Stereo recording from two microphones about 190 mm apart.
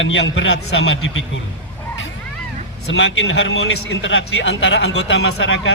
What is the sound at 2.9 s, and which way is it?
A man's voice, 75° left (ahead or behind).